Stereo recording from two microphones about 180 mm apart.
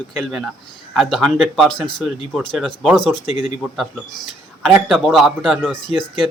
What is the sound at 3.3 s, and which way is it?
Speech, 40° left (ahead or behind).